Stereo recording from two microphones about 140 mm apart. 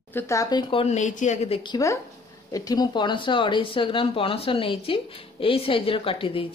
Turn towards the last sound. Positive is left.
turn(degrees=40)  # may be behind; listen again after turning